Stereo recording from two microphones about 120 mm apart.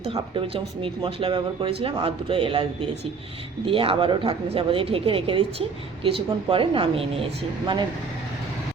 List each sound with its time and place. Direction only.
0.1 s a woman's voice: 45° right (ahead or behind)